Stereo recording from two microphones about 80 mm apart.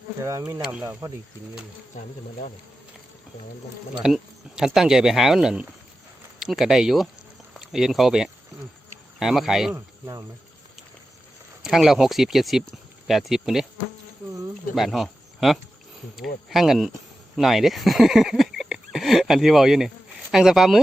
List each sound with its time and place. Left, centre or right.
0.2 s speech: right
0.6 s speech: centre
4.0 s speech: centre
9.7 s speech: right
11.6 s speech: centre
14.8 s speech: centre